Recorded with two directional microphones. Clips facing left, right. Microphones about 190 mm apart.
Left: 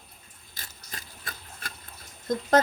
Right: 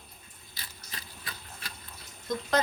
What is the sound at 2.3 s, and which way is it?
Speech, 50° left (ahead or behind).